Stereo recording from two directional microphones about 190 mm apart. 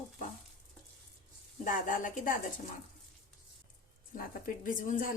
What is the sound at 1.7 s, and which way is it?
Speech, 45° left (ahead or behind).